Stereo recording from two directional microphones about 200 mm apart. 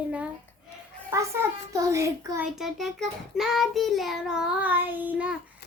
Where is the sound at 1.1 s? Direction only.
15° right (ahead or behind).